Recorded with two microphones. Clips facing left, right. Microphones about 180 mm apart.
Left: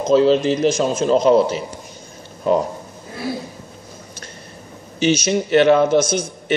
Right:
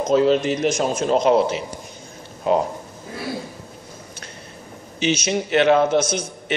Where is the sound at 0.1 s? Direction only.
30° left (ahead or behind).